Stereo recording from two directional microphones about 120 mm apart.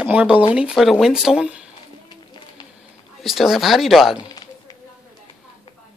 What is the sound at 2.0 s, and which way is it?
Music, 40° left (ahead or behind).